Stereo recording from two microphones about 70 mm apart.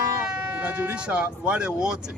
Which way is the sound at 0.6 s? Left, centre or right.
Centre.